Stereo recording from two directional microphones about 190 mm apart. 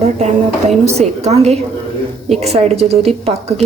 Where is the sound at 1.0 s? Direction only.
35° right (ahead or behind).